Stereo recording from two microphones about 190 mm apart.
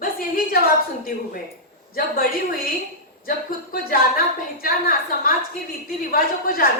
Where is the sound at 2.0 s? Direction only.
50° left (ahead or behind).